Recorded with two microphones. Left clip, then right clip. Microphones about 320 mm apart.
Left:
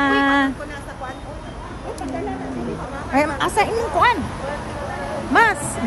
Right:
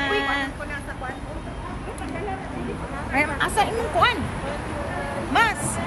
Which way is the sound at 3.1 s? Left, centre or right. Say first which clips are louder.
Left 3 dB; left.